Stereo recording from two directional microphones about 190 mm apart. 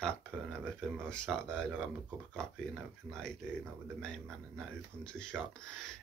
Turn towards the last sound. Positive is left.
turn(degrees=5)  # may be behind; listen again after turning